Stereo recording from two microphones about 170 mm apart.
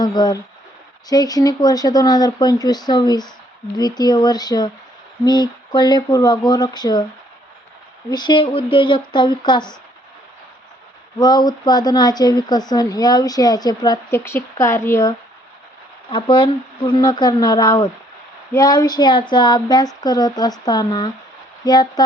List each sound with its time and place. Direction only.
0.0 s a woman's voice: 25° left (ahead or behind)
8.1 s a woman's voice: 25° left (ahead or behind)
11.2 s a woman's voice: 25° left (ahead or behind)
16.0 s a woman's voice: 30° left (ahead or behind)